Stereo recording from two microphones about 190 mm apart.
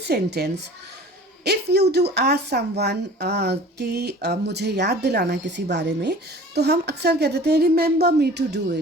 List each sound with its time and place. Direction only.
0.0 s a woman's voice: 60° right (ahead or behind)